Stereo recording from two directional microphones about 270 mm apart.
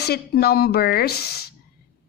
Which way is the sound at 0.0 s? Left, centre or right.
Left.